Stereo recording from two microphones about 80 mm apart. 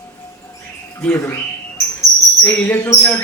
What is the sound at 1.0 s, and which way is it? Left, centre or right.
Speech, left.